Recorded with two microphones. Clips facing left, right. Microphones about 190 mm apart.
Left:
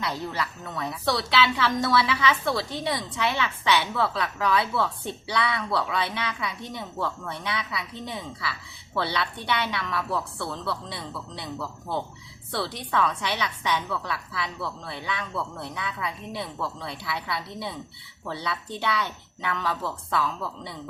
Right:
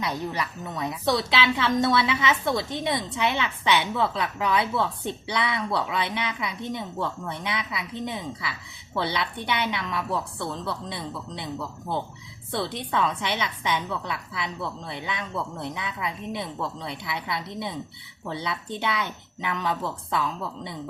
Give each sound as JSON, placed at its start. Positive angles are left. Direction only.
{"t": 0.0, "sound": "a woman's voice", "side_deg": -15}
{"t": 12.5, "sound": "a woman's voice", "side_deg": -20}